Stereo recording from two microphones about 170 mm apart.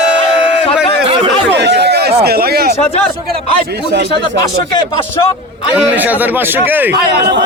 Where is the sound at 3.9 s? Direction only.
80° right.